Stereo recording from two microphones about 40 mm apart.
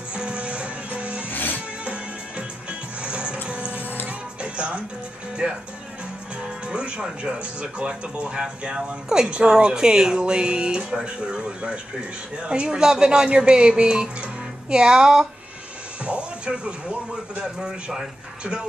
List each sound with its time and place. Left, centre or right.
0.1 s music: right
1.3 s music: left
1.9 s music: right
5.4 s speech: centre
6.4 s music: right
7.8 s speech: right
16.0 s speech: right